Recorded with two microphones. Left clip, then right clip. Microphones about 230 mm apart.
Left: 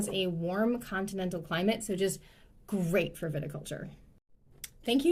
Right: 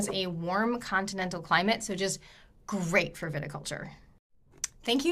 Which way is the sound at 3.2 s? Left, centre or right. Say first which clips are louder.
Right 1 dB; right.